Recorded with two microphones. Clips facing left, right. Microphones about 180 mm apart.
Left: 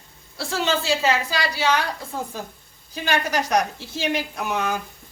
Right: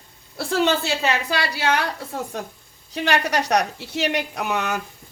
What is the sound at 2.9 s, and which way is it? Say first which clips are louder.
A man's voice: right 2 dB; 70° right (ahead or behind).